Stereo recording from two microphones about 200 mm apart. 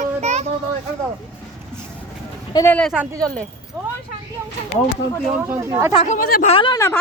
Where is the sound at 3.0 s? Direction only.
15° right (ahead or behind).